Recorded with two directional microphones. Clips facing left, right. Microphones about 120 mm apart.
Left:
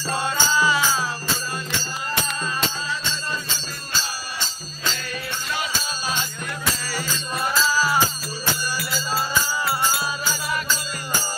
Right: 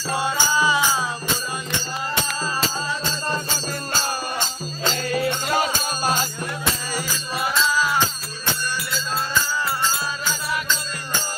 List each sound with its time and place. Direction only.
0.1 s music: 15° right (ahead or behind)
2.6 s music: 45° right (ahead or behind)
6.9 s music: 10° right (ahead or behind)
7.5 s music: centre (ahead or behind)